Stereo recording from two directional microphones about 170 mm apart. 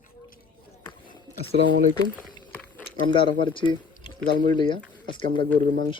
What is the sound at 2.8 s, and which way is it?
Speech, 30° left (ahead or behind).